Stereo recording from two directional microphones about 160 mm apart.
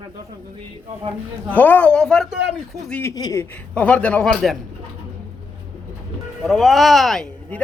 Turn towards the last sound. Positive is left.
turn(degrees=0)  # may be behind; listen again after turning